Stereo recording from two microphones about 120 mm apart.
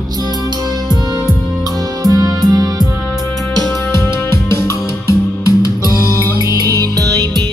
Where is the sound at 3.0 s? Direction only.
Centre (ahead or behind).